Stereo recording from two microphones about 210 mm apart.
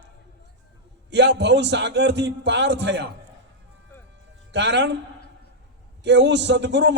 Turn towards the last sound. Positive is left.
turn(degrees=-55)  # may be behind; listen again after turning